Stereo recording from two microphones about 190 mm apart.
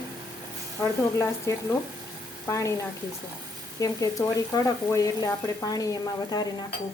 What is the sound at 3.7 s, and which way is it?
Speech, 20° left (ahead or behind).